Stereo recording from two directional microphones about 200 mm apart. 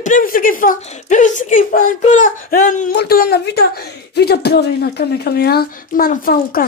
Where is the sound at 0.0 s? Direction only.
40° left (ahead or behind).